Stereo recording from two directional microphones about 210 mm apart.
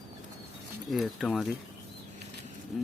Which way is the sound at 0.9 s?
Centre (ahead or behind).